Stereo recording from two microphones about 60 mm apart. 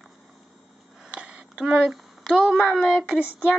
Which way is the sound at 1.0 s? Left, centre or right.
Centre.